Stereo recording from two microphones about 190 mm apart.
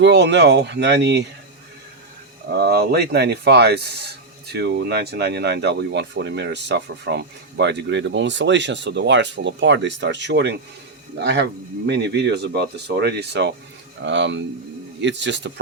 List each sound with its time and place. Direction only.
0.0 s speech: 65° right (ahead or behind)
2.5 s speech: 60° right (ahead or behind)